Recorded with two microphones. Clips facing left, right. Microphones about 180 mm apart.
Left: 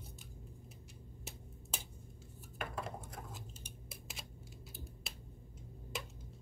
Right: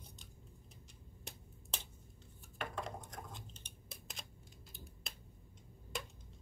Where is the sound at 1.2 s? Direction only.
10° left (ahead or behind).